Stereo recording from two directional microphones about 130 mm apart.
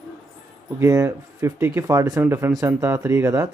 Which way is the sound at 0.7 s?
25° right (ahead or behind).